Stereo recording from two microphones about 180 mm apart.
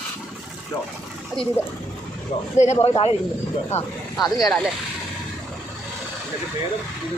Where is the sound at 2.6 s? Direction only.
35° left (ahead or behind).